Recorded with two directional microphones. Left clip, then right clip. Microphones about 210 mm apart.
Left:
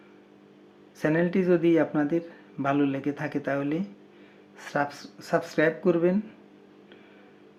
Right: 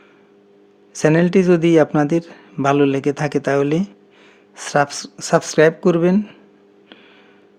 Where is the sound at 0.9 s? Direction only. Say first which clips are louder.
Right 10 dB; 50° right (ahead or behind).